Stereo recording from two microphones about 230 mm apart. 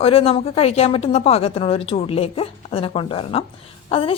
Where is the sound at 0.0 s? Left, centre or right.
Left.